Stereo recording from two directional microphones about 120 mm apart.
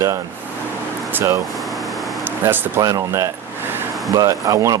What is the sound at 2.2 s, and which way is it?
Speech, 20° right (ahead or behind).